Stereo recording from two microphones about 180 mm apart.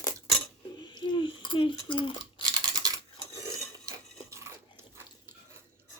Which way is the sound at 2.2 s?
25° right (ahead or behind).